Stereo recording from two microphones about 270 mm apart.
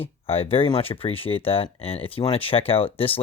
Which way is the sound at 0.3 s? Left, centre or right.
Left.